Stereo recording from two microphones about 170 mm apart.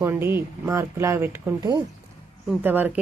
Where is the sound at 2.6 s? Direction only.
10° right (ahead or behind).